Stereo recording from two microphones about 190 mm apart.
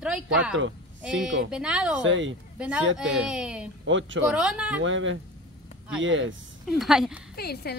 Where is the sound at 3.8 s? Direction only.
80° right.